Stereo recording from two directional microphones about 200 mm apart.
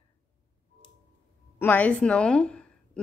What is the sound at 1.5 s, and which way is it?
A woman's voice, 10° left (ahead or behind).